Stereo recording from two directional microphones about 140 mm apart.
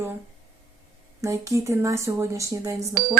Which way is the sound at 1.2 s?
20° right (ahead or behind).